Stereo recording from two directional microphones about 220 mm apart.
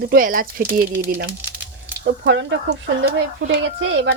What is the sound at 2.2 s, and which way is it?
Speech, 55° right (ahead or behind).